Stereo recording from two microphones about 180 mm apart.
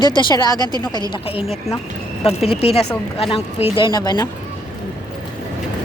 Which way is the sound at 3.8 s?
20° left (ahead or behind).